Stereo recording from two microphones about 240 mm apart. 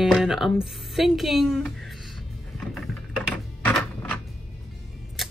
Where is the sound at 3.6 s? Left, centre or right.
Centre.